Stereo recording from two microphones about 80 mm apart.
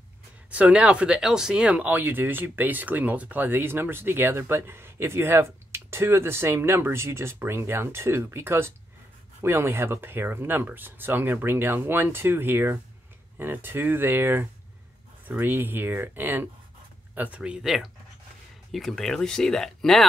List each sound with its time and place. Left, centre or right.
0.5 s speech: centre
18.7 s speech: centre